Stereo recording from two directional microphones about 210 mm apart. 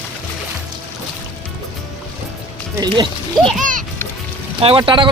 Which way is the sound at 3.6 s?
40° right (ahead or behind).